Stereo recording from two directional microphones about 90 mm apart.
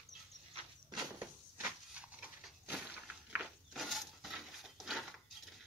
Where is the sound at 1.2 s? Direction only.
20° right (ahead or behind).